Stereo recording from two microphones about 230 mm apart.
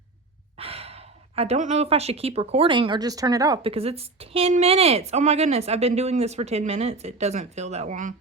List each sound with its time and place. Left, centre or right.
0.5 s speech: right